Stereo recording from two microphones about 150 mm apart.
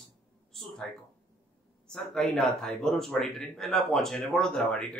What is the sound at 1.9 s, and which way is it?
Speech, centre (ahead or behind).